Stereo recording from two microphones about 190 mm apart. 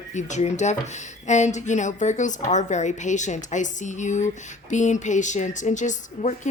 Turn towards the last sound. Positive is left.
turn(degrees=40)  # may be behind; listen again after turning